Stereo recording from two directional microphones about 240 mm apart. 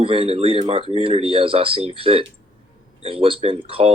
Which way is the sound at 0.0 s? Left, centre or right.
Right.